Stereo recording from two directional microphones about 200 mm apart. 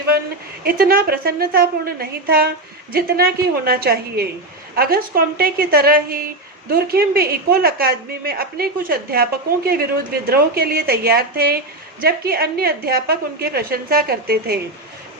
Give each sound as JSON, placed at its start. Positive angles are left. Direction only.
{"t": 0.6, "sound": "a woman's voice", "side_deg": -45}